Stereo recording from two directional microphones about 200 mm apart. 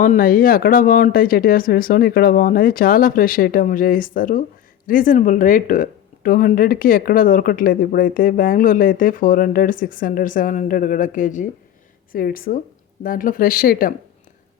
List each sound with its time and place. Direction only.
0.0 s speech: 45° left (ahead or behind)